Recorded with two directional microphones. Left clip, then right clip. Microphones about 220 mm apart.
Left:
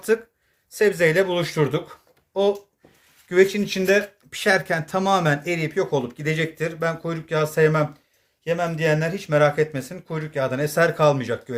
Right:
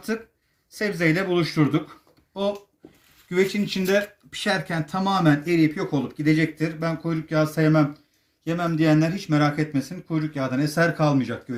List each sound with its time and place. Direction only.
0.8 s speech: 50° left (ahead or behind)
3.2 s speech: 40° left (ahead or behind)
9.0 s speech: 45° left (ahead or behind)